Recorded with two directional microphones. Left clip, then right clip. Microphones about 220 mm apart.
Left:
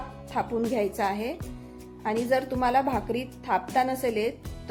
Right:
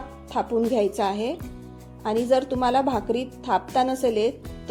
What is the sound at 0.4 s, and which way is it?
A woman's voice, 20° right (ahead or behind).